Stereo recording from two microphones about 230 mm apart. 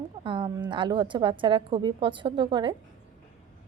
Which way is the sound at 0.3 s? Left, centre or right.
Right.